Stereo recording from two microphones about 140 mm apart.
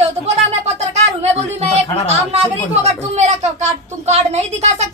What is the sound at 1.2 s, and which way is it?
A woman's voice, 50° right (ahead or behind).